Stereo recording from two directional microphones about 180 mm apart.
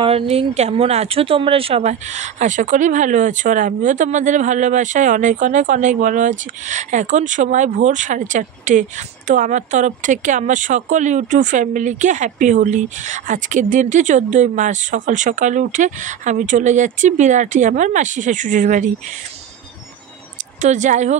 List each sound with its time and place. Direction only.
0.0 s speech: 30° right (ahead or behind)
20.6 s speech: 45° right (ahead or behind)